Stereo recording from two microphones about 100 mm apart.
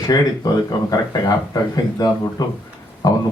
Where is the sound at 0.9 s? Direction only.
40° left (ahead or behind).